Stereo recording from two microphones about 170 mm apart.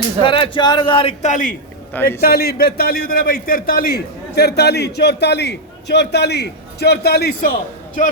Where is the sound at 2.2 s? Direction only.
65° left (ahead or behind).